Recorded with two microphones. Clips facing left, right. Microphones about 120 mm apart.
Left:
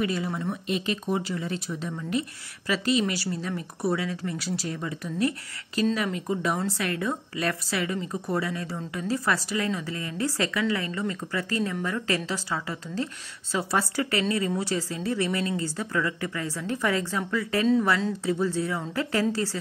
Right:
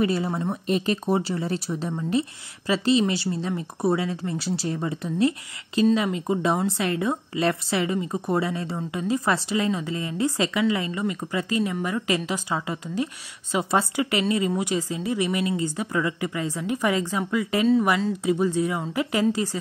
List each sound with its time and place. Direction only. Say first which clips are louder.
0.0 s a woman's voice: right 4 dB; 30° right (ahead or behind); by 19.6 s 15° right (ahead or behind)